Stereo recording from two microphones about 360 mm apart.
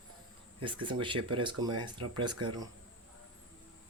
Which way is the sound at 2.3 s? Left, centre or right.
Right.